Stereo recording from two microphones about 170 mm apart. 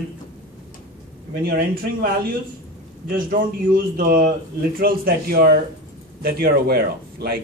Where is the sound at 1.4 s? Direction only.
65° right (ahead or behind).